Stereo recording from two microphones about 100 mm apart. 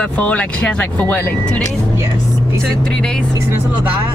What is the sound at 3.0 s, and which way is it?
Speech, 10° left (ahead or behind).